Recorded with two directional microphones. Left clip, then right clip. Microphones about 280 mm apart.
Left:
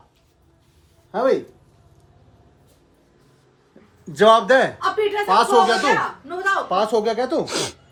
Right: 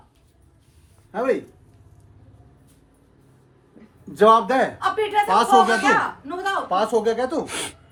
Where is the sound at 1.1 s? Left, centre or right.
Centre.